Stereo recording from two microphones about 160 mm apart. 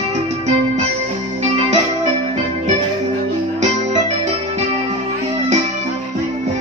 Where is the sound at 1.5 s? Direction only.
40° right (ahead or behind).